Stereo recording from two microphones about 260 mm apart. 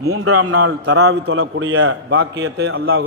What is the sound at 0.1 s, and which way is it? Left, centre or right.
A man's voice, right.